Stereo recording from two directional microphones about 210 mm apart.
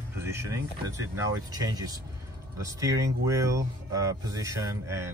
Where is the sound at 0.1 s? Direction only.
10° right (ahead or behind).